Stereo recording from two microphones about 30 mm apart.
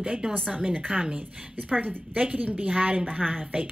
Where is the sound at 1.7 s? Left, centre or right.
Right.